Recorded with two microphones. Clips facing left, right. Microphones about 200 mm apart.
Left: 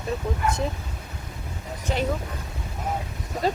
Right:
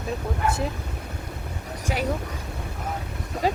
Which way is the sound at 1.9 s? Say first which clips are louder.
Left 2 dB; 10° right (ahead or behind).